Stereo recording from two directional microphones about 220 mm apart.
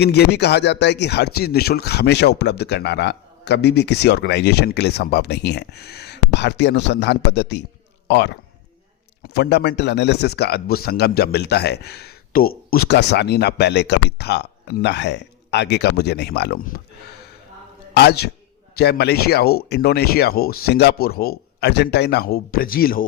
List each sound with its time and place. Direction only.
0.0 s speech: 50° left (ahead or behind)
17.9 s a man's voice: 50° left (ahead or behind)